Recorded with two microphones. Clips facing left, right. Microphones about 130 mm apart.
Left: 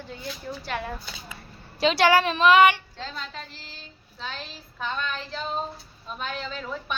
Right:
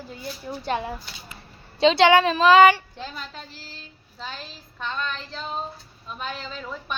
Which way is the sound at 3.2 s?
Centre (ahead or behind).